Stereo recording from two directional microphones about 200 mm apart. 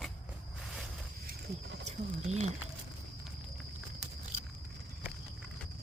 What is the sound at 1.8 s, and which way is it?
Speech, 35° right (ahead or behind).